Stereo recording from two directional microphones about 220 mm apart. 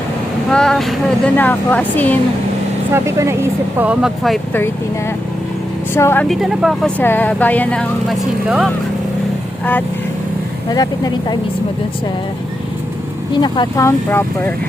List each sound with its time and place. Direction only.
0.5 s speech: 5° left (ahead or behind)
2.9 s speech: 10° right (ahead or behind)
5.9 s speech: 10° left (ahead or behind)
6.4 s speech: centre (ahead or behind)
8.4 s speech: 5° right (ahead or behind)
10.7 s speech: 15° left (ahead or behind)
13.3 s speech: 20° left (ahead or behind)